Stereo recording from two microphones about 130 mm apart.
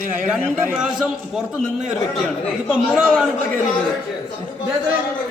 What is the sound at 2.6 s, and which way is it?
Speech, 10° right (ahead or behind).